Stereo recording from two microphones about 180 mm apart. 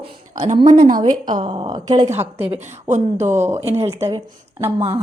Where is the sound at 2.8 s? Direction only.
40° right (ahead or behind).